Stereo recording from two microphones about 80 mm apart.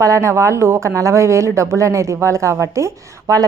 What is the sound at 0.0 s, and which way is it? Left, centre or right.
Speech, right.